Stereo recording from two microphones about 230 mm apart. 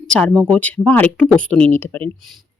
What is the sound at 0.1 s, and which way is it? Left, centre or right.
Speech, centre.